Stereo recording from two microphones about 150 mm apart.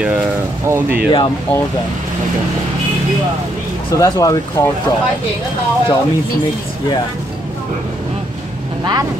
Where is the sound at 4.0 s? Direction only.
25° left (ahead or behind).